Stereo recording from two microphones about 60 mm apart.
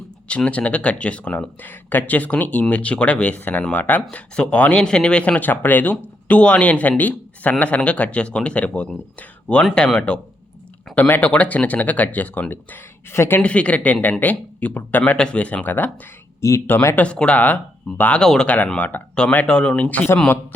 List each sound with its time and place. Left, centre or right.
0.3 s speech: left
3.3 s speech: left
5.4 s speech: left
13.4 s speech: centre
16.4 s speech: left
16.9 s speech: left
18.2 s speech: centre
18.4 s speech: left
19.5 s speech: centre